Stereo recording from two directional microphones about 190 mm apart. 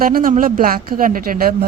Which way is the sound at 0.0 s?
50° right (ahead or behind).